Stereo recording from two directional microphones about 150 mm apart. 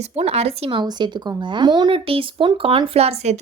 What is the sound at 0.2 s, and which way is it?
Speech, 45° right (ahead or behind).